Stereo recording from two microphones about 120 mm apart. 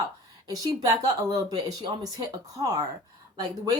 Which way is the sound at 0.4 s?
30° right (ahead or behind).